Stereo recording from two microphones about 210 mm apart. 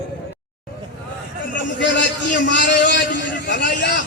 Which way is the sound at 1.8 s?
60° left (ahead or behind).